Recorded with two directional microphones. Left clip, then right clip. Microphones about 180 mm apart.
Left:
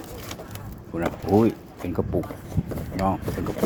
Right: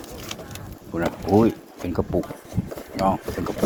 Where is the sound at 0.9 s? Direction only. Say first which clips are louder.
Right 2 dB; centre (ahead or behind).